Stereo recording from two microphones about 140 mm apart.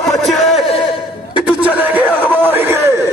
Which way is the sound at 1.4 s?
10° right (ahead or behind).